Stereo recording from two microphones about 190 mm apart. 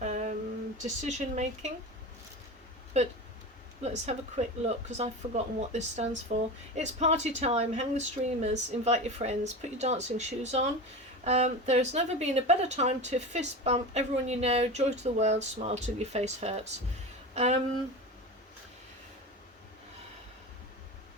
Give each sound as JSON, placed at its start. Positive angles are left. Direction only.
{"t": 0.0, "sound": "a sound", "side_deg": -40}
{"t": 0.8, "sound": "speech", "side_deg": -40}
{"t": 3.8, "sound": "speech", "side_deg": -35}